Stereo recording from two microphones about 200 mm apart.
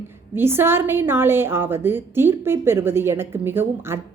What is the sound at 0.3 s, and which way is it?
A woman's voice, 10° right (ahead or behind).